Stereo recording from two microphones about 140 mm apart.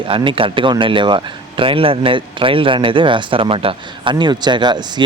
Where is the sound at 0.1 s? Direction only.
40° right (ahead or behind).